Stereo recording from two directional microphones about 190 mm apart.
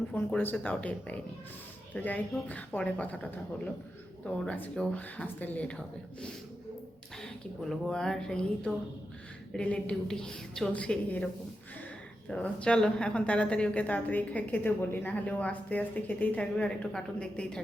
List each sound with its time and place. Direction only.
0.1 s a woman's voice: 5° left (ahead or behind)
7.2 s a woman's voice: centre (ahead or behind)
12.3 s a woman's voice: 5° left (ahead or behind)